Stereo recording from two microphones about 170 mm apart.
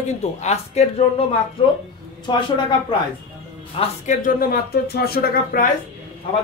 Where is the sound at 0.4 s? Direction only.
40° left (ahead or behind).